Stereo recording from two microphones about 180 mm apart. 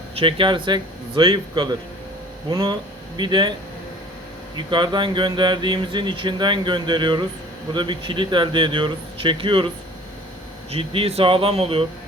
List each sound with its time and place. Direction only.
0.2 s speech: 30° right (ahead or behind)
4.5 s speech: 25° right (ahead or behind)
10.7 s speech: 35° right (ahead or behind)